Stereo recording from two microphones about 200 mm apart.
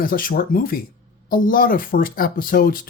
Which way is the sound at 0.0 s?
45° left (ahead or behind).